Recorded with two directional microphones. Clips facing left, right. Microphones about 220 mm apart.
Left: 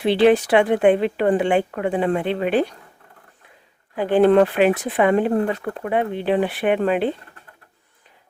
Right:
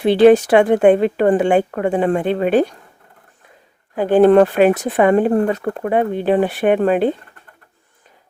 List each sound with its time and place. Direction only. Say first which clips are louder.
0.0 s speech: right 5 dB; 45° right (ahead or behind)
3.9 s speech: right 4 dB; 45° right (ahead or behind)